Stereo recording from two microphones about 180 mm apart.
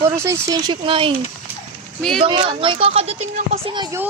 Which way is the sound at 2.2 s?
30° right (ahead or behind).